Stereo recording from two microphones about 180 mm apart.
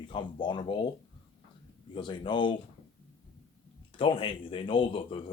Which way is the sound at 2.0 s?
25° left (ahead or behind).